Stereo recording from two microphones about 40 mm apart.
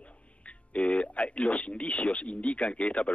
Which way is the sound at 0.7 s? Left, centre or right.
Left.